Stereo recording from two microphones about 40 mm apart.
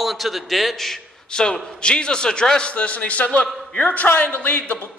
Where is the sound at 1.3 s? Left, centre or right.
Centre.